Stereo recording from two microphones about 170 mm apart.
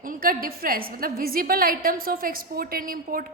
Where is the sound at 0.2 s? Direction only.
60° right (ahead or behind).